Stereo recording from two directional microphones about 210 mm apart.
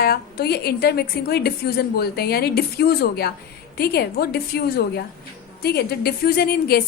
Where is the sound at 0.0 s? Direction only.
45° left (ahead or behind).